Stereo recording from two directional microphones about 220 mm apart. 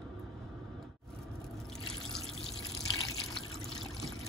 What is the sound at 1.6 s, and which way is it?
Water, centre (ahead or behind).